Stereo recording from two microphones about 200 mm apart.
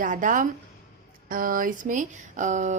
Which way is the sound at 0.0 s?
40° right (ahead or behind).